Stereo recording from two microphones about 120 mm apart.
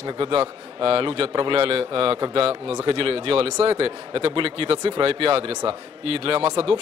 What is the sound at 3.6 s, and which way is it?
Speech, 50° right (ahead or behind).